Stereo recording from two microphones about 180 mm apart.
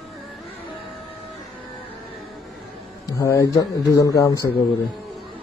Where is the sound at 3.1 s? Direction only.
20° left (ahead or behind).